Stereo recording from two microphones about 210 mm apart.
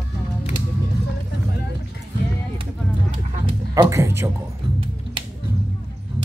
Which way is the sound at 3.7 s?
15° right (ahead or behind).